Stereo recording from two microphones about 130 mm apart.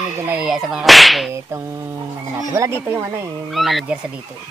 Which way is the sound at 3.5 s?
Centre (ahead or behind).